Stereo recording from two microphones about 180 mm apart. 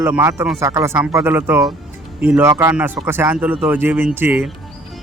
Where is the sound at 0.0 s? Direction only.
10° right (ahead or behind).